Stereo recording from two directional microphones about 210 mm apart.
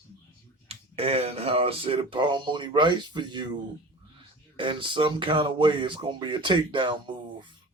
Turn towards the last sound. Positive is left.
turn(degrees=-25)  # may be behind; listen again after turning